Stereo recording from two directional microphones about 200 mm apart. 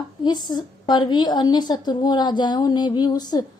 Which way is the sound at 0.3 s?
20° left (ahead or behind).